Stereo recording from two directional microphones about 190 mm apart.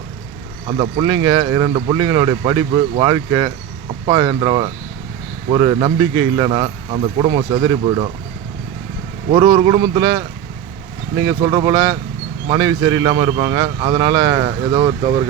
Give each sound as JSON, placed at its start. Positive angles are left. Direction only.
{"t": 0.7, "sound": "a man's voice", "side_deg": -25}
{"t": 9.6, "sound": "a man's voice", "side_deg": -25}